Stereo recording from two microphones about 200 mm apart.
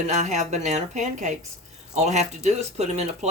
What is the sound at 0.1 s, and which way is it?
Speech, 35° right (ahead or behind).